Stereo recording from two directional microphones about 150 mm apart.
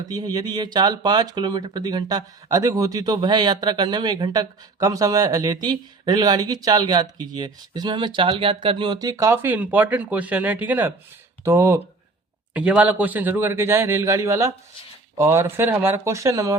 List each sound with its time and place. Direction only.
0.1 s a man's voice: 25° right (ahead or behind)